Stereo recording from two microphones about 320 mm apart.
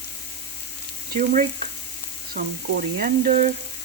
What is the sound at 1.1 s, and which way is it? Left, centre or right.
Frying, right.